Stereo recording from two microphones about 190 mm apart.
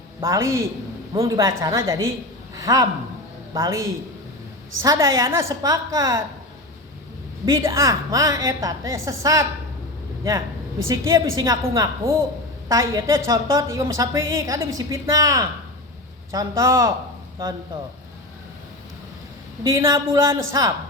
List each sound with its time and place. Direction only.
0.2 s a woman's voice: 15° right (ahead or behind)
7.4 s a woman's voice: 15° right (ahead or behind)
10.8 s a woman's voice: 15° right (ahead or behind)
19.6 s a woman's voice: 15° right (ahead or behind)